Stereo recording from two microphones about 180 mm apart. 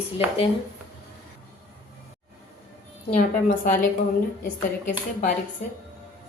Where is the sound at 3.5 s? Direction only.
50° left (ahead or behind).